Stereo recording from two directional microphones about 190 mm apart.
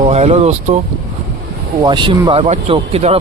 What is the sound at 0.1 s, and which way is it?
Speech, 35° right (ahead or behind).